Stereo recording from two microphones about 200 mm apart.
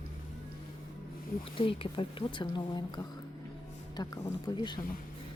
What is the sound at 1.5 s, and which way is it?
A woman's voice, 25° left (ahead or behind).